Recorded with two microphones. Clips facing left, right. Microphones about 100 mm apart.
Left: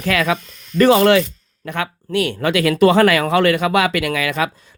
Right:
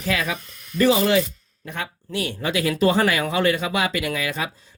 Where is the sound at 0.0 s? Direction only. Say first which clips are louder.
Left 6 dB; 70° left (ahead or behind).